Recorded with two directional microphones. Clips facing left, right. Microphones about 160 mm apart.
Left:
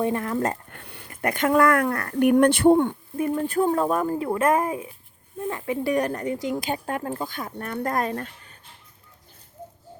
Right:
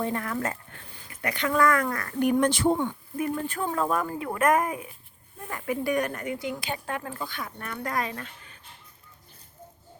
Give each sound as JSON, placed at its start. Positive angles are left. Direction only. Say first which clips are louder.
{"t": 0.0, "sound": "speech", "louder": "left 5 dB", "side_deg": 20}
{"t": 0.9, "sound": "speech", "louder": "left 6 dB", "side_deg": 60}
{"t": 3.2, "sound": "speech", "louder": "left 6 dB", "side_deg": 35}